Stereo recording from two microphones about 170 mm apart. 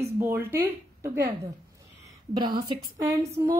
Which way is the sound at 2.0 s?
25° right (ahead or behind).